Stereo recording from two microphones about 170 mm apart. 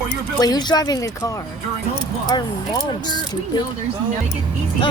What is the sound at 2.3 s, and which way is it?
Speech, 25° left (ahead or behind).